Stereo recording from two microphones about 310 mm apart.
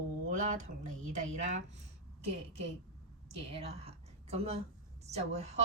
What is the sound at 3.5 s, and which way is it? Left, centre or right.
A woman's voice, centre.